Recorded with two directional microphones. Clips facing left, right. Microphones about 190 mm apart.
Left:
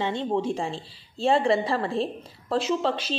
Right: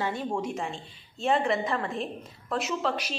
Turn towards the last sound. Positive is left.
turn(degrees=30)  # may be behind; listen again after turning